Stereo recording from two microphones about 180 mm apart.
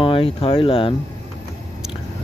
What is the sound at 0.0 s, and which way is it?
Speech, 30° left (ahead or behind).